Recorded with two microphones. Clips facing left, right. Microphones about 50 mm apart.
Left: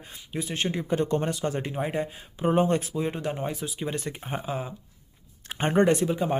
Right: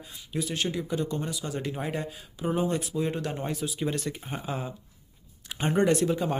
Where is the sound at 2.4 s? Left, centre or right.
Left.